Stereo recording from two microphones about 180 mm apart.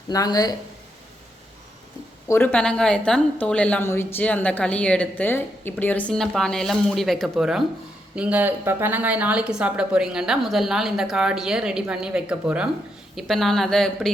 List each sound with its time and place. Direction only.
0.1 s speech: 20° left (ahead or behind)
2.2 s a woman's voice: 10° left (ahead or behind)